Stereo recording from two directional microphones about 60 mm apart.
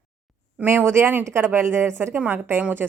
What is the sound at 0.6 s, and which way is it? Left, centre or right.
A woman's voice, right.